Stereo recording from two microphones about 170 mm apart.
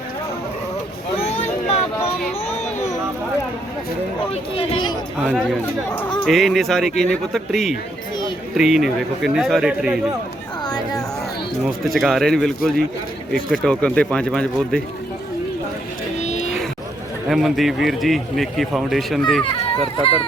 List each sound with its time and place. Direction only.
1.2 s a sound: 40° left (ahead or behind)
4.5 s speech: 30° left (ahead or behind)
5.2 s a man's voice: 5° right (ahead or behind)
11.9 s a man's voice: centre (ahead or behind)
16.2 s a sound: 40° left (ahead or behind)
17.2 s a man's voice: centre (ahead or behind)